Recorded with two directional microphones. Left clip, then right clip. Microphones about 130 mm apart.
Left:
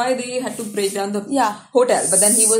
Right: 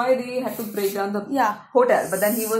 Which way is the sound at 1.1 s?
15° left (ahead or behind).